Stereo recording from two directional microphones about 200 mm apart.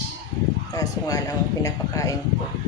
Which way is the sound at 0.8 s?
20° left (ahead or behind).